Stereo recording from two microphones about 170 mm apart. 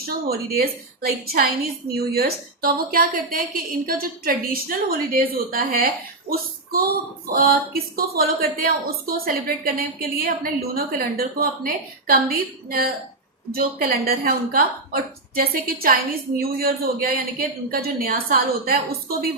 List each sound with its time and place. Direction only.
0.3 s a woman's voice: 65° right (ahead or behind)